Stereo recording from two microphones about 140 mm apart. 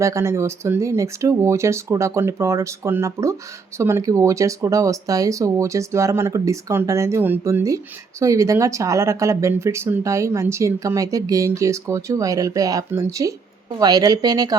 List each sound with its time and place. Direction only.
0.0 s speech: 20° right (ahead or behind)